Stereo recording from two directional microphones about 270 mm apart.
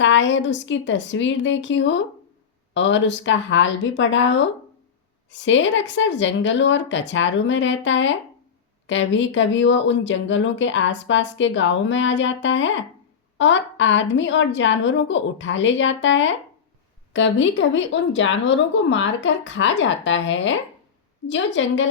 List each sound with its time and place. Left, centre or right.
0.0 s speech: left